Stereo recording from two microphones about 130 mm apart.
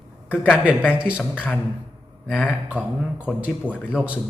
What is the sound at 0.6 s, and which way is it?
Speech, 10° right (ahead or behind).